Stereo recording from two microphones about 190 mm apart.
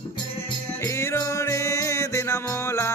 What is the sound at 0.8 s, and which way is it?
Music, 15° left (ahead or behind).